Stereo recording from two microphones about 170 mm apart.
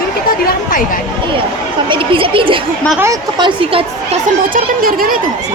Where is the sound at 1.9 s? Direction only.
30° right (ahead or behind).